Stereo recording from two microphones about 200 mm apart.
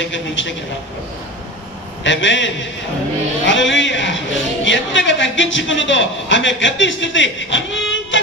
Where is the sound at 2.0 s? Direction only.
65° left (ahead or behind).